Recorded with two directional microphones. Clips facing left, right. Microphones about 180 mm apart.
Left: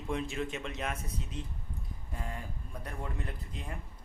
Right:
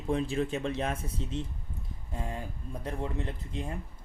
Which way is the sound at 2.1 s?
25° right (ahead or behind).